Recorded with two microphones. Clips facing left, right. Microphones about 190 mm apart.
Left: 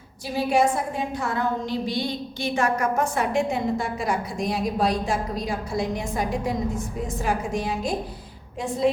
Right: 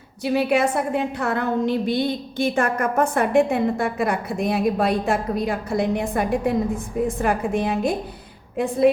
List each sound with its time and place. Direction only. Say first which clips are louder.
0.3 s a woman's voice: right 1 dB; 65° right (ahead or behind)